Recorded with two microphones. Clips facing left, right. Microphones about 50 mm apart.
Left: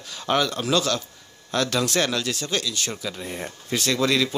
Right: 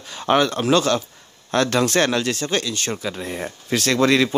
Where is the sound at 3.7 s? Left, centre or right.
Right.